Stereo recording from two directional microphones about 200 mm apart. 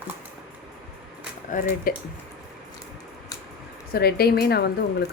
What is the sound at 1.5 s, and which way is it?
Speech, 40° left (ahead or behind).